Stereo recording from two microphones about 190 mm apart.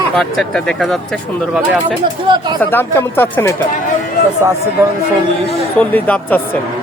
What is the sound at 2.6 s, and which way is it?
Speech, 10° left (ahead or behind).